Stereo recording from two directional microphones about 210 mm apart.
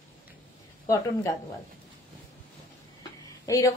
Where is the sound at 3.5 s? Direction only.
15° left (ahead or behind).